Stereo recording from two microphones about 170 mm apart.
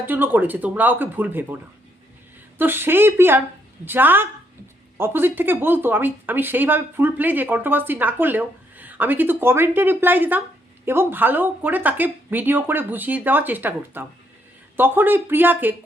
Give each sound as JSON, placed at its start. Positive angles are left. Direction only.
{"t": 0.0, "sound": "speech", "side_deg": -10}
{"t": 2.6, "sound": "speech", "side_deg": -10}